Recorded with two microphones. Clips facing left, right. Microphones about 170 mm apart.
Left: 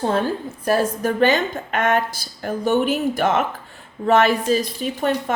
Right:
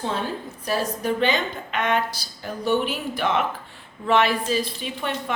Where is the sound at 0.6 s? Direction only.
50° left (ahead or behind).